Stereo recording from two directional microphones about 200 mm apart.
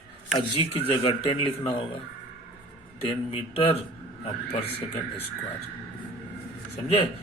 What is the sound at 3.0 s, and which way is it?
Speech, 30° left (ahead or behind).